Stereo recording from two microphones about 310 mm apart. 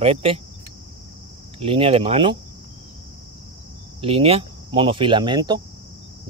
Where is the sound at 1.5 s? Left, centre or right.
Centre.